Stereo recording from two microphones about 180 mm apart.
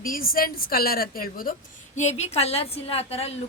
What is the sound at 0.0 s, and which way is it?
A woman's voice, 50° left (ahead or behind).